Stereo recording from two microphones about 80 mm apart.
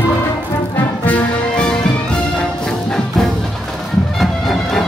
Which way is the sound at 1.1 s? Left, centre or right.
Centre.